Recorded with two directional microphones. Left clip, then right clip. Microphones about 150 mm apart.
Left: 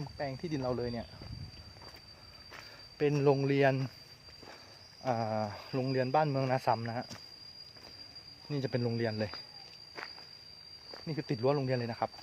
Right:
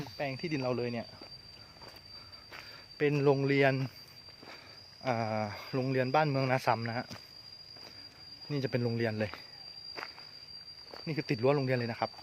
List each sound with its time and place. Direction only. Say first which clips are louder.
0.0 s speech: right 2 dB; 10° right (ahead or behind)
3.0 s speech: right 1 dB; 5° left (ahead or behind)
5.0 s speech: even; 10° right (ahead or behind)
8.4 s speech: right 1 dB; 10° right (ahead or behind)
10.9 s speech: right 3 dB; 15° right (ahead or behind)